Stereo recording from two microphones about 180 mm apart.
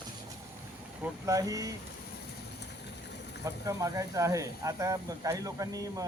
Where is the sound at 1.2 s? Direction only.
20° right (ahead or behind).